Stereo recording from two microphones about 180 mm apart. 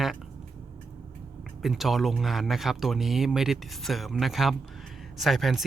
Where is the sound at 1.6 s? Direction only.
Centre (ahead or behind).